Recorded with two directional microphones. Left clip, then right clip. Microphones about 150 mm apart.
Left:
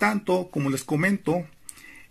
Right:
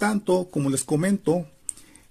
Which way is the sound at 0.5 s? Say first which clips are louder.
Right 2 dB; 20° right (ahead or behind).